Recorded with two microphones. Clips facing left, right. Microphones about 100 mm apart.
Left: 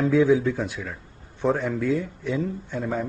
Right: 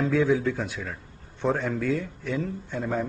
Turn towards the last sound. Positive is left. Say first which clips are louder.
# left 1 dB
turn(degrees=0)  # may be behind; listen again after turning